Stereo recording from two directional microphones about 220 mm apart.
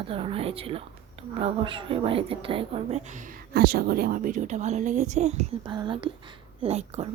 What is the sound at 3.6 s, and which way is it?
A woman's voice, 45° right (ahead or behind).